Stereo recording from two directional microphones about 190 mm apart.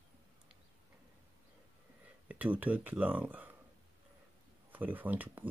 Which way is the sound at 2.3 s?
10° right (ahead or behind).